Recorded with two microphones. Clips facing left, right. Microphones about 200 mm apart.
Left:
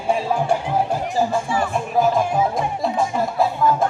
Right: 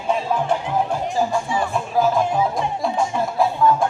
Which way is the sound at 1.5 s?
20° right (ahead or behind).